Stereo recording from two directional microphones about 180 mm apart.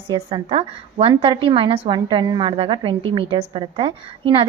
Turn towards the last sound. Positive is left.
turn(degrees=-30)  # may be behind; listen again after turning